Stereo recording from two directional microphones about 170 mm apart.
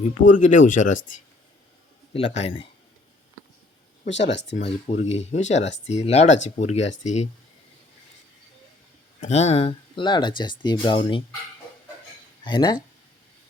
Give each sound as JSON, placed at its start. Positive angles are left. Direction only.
{"t": 0.1, "sound": "speech", "side_deg": 50}
{"t": 2.1, "sound": "speech", "side_deg": 35}
{"t": 4.1, "sound": "speech", "side_deg": 90}
{"t": 4.9, "sound": "speech", "side_deg": 40}
{"t": 9.2, "sound": "speech", "side_deg": 40}
{"t": 12.5, "sound": "speech", "side_deg": 25}